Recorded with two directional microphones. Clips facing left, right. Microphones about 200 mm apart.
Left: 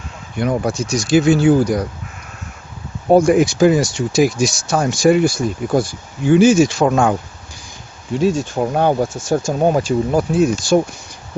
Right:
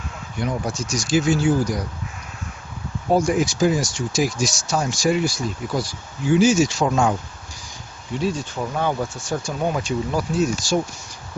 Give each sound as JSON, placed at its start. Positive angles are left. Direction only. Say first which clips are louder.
{"t": 0.3, "sound": "speech", "louder": "left 7 dB", "side_deg": 60}
{"t": 3.1, "sound": "speech", "louder": "left 7 dB", "side_deg": 60}
{"t": 8.2, "sound": "speech", "louder": "left 8 dB", "side_deg": 45}
{"t": 10.1, "sound": "speech", "louder": "left 5 dB", "side_deg": 55}